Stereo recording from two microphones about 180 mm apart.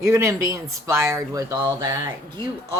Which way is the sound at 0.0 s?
15° right (ahead or behind).